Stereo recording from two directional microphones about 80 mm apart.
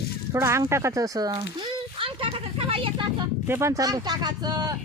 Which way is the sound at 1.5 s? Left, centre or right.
Right.